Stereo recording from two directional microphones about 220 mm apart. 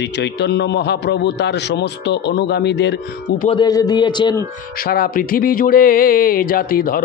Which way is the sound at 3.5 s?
20° left (ahead or behind).